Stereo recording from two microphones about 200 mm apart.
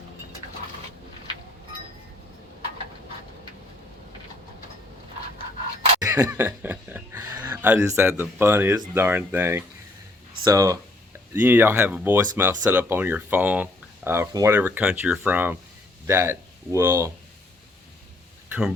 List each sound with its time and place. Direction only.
6.0 s speech: 10° right (ahead or behind)